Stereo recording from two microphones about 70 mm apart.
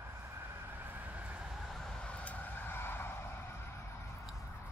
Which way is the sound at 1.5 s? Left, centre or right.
Centre.